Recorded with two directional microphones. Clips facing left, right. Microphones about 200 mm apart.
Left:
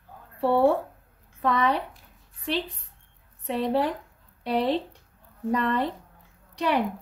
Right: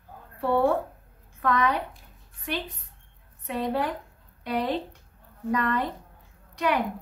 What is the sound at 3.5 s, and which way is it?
A woman's voice, 30° left (ahead or behind).